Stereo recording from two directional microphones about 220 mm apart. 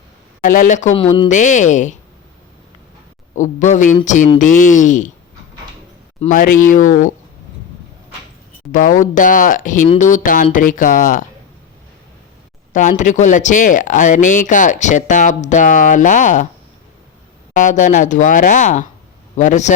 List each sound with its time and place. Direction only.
0.4 s speech: 35° left (ahead or behind)
1.3 s speech: 35° left (ahead or behind)
3.3 s speech: 35° left (ahead or behind)
6.1 s speech: 35° left (ahead or behind)
8.7 s speech: 35° left (ahead or behind)
12.7 s speech: 35° left (ahead or behind)
17.5 s speech: 35° left (ahead or behind)